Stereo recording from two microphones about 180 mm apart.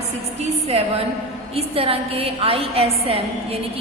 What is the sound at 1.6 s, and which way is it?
A woman's voice, 30° right (ahead or behind).